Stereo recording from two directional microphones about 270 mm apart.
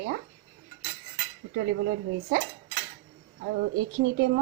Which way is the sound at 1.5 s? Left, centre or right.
Right.